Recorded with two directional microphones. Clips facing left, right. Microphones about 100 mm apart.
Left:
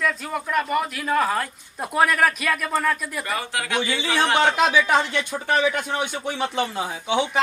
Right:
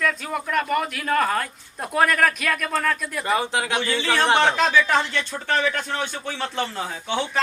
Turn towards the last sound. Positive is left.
turn(degrees=15)  # may be behind; listen again after turning